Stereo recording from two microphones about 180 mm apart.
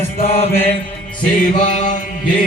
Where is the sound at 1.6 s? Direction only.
45° left (ahead or behind).